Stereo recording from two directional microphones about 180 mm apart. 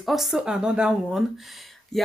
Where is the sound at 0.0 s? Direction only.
Centre (ahead or behind).